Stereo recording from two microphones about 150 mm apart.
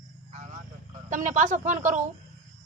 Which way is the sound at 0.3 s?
55° right (ahead or behind).